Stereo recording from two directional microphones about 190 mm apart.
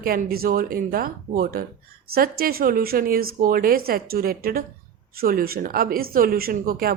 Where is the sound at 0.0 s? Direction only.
50° right (ahead or behind).